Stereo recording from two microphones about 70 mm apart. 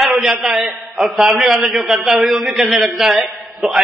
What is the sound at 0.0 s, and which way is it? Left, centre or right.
A man's voice, centre.